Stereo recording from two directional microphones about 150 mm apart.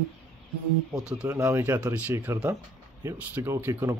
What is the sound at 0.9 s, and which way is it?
Speech, 5° right (ahead or behind).